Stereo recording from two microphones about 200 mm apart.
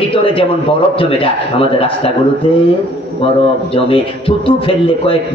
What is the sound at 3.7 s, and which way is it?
A man's voice, 25° left (ahead or behind).